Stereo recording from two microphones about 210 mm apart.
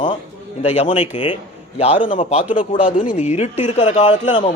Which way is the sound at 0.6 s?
30° left (ahead or behind).